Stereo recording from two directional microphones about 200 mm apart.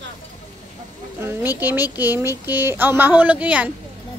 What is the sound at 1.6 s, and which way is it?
A woman's voice, 10° right (ahead or behind).